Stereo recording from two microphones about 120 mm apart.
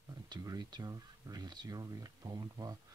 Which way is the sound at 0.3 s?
30° right (ahead or behind).